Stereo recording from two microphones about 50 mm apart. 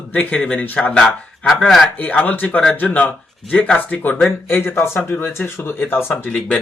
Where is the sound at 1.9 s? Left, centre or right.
Left.